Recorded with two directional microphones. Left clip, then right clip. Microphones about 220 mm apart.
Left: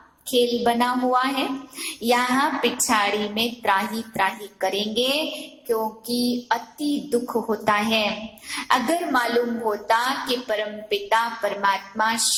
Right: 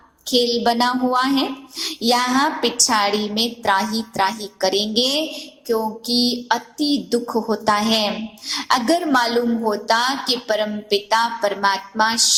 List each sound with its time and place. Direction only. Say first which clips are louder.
0.3 s a child's voice: right 3 dB; 45° right (ahead or behind)